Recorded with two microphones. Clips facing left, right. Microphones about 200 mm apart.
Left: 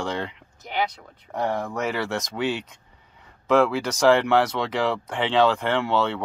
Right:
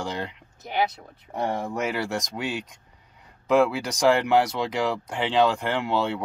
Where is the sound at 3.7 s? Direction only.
5° right (ahead or behind).